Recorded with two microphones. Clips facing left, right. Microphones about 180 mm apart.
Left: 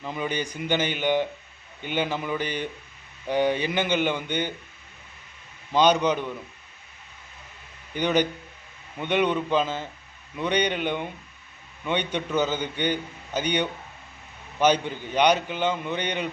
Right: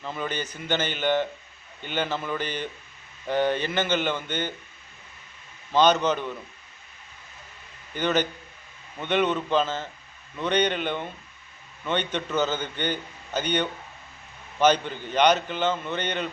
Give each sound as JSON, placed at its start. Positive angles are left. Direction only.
{"t": 0.0, "sound": "a man's voice", "side_deg": 15}
{"t": 5.7, "sound": "a man's voice", "side_deg": 10}
{"t": 7.9, "sound": "a man's voice", "side_deg": 15}